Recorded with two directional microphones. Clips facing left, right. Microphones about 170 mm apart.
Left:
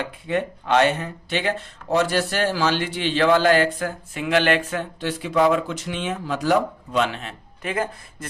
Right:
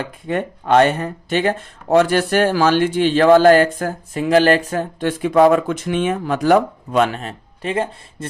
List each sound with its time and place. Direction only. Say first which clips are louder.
0.0 s speech: right 2 dB; 50° right (ahead or behind); by 8.3 s 30° right (ahead or behind)